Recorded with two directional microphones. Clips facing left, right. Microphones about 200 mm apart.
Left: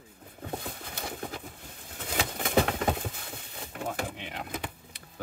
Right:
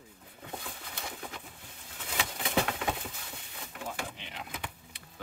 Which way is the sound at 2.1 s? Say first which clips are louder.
Left 5 dB; 40° left (ahead or behind).